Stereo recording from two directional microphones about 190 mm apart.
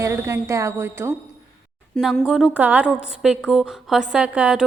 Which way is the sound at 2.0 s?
Centre (ahead or behind).